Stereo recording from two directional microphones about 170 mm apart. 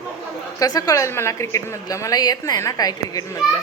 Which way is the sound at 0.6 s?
20° left (ahead or behind).